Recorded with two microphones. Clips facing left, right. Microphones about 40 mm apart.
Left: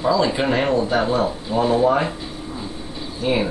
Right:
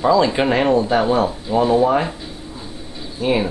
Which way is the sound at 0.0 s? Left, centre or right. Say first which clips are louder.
Right 3 dB; right.